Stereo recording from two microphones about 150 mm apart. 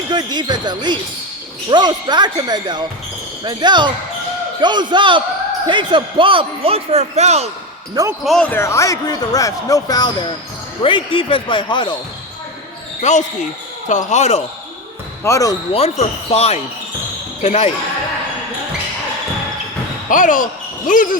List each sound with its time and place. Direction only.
0.1 s a man's voice: 30° right (ahead or behind); by 7.5 s 45° right (ahead or behind)
8.2 s speech: 5° left (ahead or behind); by 11.9 s 30° left (ahead or behind)
13.0 s speech: 50° left (ahead or behind)
15.2 s speech: 20° left (ahead or behind)
15.7 s speech: 45° left (ahead or behind)
20.1 s speech: 60° left (ahead or behind)